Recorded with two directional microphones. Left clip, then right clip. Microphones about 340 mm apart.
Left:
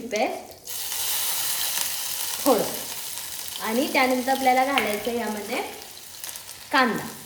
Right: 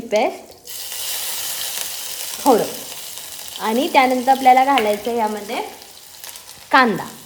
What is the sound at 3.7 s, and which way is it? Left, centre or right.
Speech, right.